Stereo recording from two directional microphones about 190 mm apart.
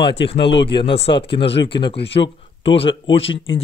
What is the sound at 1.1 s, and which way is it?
Speech, 30° left (ahead or behind).